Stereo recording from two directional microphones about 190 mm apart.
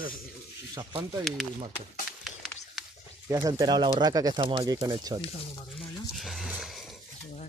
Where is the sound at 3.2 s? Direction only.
20° right (ahead or behind).